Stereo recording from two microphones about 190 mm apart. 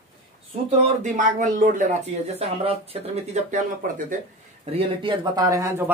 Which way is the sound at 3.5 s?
45° right (ahead or behind).